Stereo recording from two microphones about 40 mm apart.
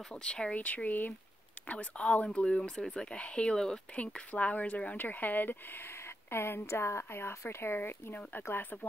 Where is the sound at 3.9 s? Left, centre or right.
Left.